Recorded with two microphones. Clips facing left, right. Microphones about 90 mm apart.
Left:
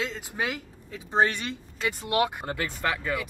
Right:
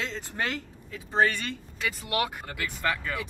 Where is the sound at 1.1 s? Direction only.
20° left (ahead or behind).